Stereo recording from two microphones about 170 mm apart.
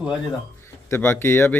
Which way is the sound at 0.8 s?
15° left (ahead or behind).